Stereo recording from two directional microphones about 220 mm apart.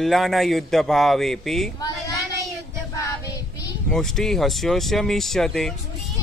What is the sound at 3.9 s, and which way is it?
Speech, centre (ahead or behind).